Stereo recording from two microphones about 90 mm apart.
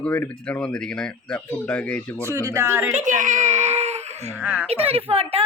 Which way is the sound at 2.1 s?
30° right (ahead or behind).